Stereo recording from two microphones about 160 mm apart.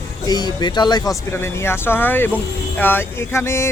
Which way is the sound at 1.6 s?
15° left (ahead or behind).